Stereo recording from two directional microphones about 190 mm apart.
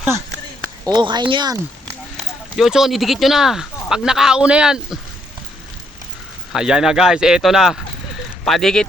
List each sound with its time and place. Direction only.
0.9 s speech: 20° right (ahead or behind)
2.6 s speech: centre (ahead or behind)
6.5 s speech: 5° right (ahead or behind)